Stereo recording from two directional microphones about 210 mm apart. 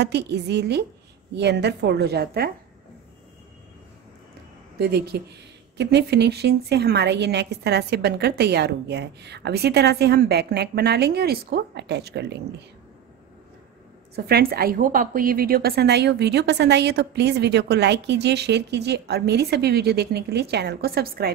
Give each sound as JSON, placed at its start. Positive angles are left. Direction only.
{"t": 0.0, "sound": "a woman's voice", "side_deg": -50}
{"t": 4.7, "sound": "a woman's voice", "side_deg": -50}
{"t": 14.1, "sound": "a woman's voice", "side_deg": -45}